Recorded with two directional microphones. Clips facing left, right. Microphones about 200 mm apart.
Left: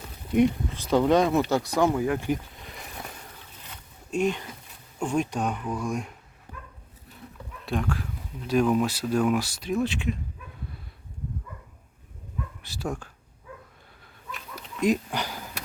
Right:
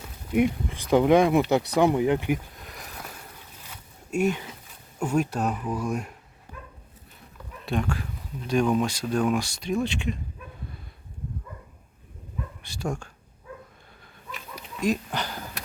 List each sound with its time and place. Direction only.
0.3 s speech: 10° right (ahead or behind)
2.6 s a sound: centre (ahead or behind)
4.9 s speech: 5° right (ahead or behind)
7.6 s speech: centre (ahead or behind)
12.6 s speech: 5° left (ahead or behind)
14.8 s speech: 15° left (ahead or behind)